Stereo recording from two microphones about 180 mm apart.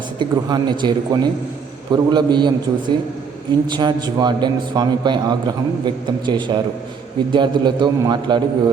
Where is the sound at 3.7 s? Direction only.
25° right (ahead or behind).